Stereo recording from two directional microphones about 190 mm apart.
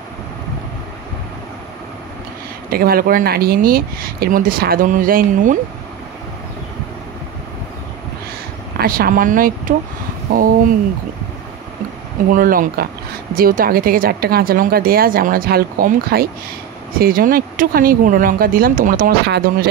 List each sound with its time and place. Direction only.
2.7 s speech: 50° right (ahead or behind)
8.7 s speech: 50° right (ahead or behind)
12.3 s speech: 45° right (ahead or behind)